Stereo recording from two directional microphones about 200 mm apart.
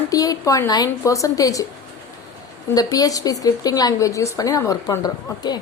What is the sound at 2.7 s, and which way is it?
A woman's voice, 20° left (ahead or behind).